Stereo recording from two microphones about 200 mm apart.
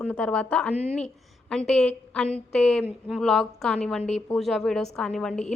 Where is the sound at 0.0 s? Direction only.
5° left (ahead or behind).